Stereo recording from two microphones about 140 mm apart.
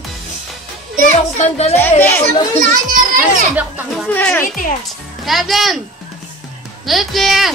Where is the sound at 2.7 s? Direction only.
70° right (ahead or behind).